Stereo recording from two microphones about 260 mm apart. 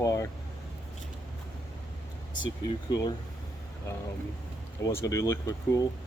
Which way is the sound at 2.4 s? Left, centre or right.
Centre.